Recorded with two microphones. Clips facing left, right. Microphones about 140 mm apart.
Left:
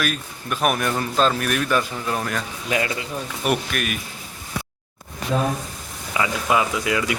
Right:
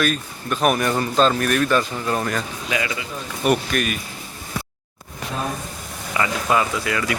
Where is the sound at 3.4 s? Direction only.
5° left (ahead or behind).